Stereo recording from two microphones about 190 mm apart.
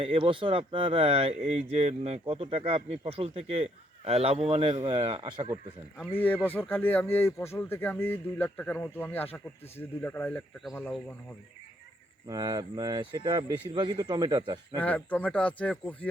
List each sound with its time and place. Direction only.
0.0 s speech: 25° right (ahead or behind)
6.1 s speech: 10° left (ahead or behind)
12.3 s speech: 20° right (ahead or behind)
14.8 s speech: 10° left (ahead or behind)